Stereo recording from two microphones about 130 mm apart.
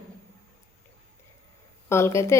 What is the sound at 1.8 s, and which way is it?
Speech, 20° left (ahead or behind).